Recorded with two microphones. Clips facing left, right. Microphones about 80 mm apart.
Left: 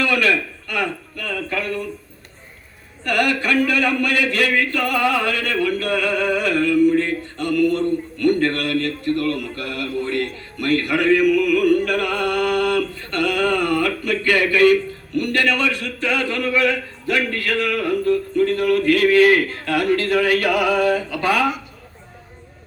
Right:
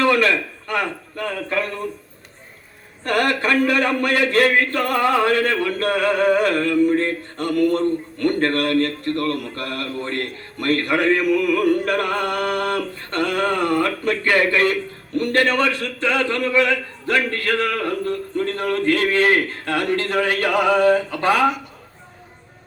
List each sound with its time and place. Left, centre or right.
0.0 s a man's voice: right
3.0 s a man's voice: right